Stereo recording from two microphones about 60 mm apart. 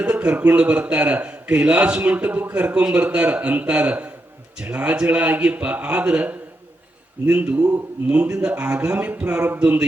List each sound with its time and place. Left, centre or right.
0.0 s a man's voice: right